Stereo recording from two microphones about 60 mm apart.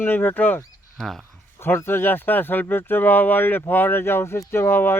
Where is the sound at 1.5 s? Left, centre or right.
Left.